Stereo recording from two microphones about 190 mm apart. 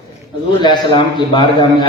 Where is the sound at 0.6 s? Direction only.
25° left (ahead or behind).